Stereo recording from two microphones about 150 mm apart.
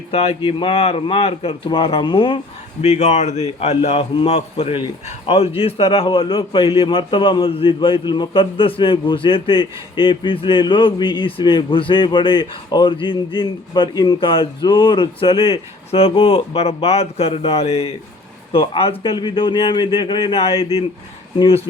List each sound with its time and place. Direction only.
0.1 s a man's voice: 40° left (ahead or behind)
2.8 s a man's voice: 45° left (ahead or behind)